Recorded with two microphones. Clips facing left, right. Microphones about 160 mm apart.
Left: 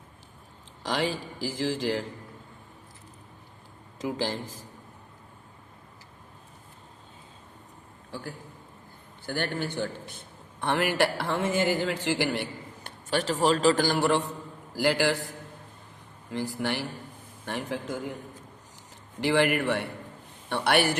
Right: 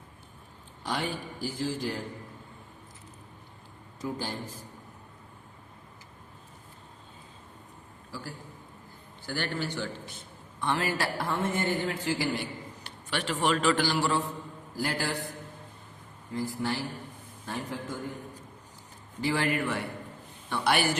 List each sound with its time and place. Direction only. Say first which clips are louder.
0.8 s a man's voice: left 4 dB; 90° left
3.9 s speech: left 4 dB; 90° left
9.2 s a man's voice: left 2 dB; 50° left (ahead or behind); by 12.1 s 85° left
12.3 s a sound: left 2 dB; 60° left (ahead or behind)
13.1 s speech: left 4 dB; 40° left (ahead or behind)
14.8 s a man's voice: left 7 dB; 90° left
16.3 s a man's voice: left 1 dB; 80° left
19.2 s a man's voice: left 4 dB; 75° left (ahead or behind)